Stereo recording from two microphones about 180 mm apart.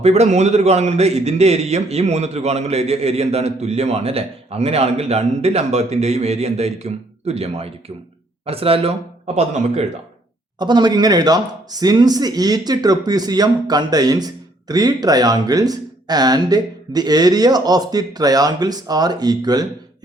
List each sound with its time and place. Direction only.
0.0 s a man's voice: 40° right (ahead or behind)
10.6 s speech: 25° right (ahead or behind)